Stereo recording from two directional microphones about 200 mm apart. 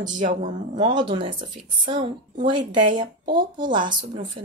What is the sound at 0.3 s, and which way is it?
Speech, 35° right (ahead or behind).